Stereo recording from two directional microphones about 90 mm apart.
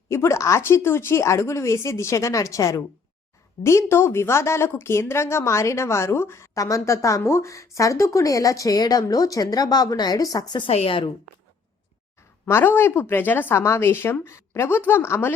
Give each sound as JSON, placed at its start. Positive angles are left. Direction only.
{"t": 0.1, "sound": "a woman's voice", "side_deg": 35}
{"t": 10.6, "sound": "a woman's voice", "side_deg": 80}
{"t": 12.5, "sound": "a woman's voice", "side_deg": 25}